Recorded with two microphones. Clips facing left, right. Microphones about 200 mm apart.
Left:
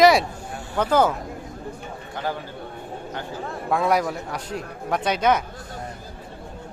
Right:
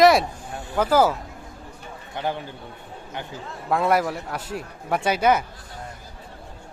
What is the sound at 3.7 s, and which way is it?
A man's voice, centre (ahead or behind).